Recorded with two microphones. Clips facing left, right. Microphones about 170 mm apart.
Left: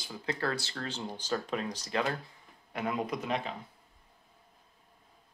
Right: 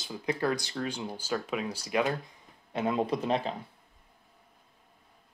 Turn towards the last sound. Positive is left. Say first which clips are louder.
# right 5 dB
turn(degrees=-30)  # may be behind; listen again after turning